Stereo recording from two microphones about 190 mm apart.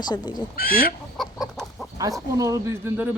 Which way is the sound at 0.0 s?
20° left (ahead or behind).